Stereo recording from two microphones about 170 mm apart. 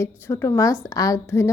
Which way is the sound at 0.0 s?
15° left (ahead or behind).